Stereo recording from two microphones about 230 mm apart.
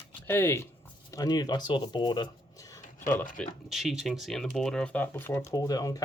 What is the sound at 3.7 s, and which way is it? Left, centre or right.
Speech, centre.